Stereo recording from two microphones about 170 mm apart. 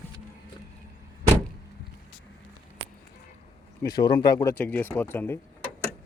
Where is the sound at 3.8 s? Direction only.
25° left (ahead or behind).